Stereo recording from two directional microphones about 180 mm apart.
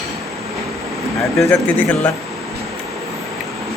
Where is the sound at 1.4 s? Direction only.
15° left (ahead or behind).